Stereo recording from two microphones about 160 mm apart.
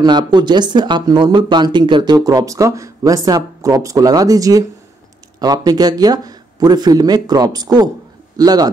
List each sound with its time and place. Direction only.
0.0 s speech: 25° right (ahead or behind)